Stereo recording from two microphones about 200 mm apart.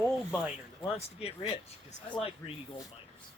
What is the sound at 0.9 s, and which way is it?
Speech, 30° left (ahead or behind).